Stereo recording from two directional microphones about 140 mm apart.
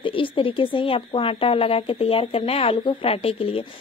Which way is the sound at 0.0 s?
40° left (ahead or behind).